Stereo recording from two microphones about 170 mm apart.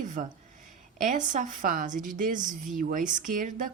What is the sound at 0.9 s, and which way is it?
A woman's voice, 50° right (ahead or behind).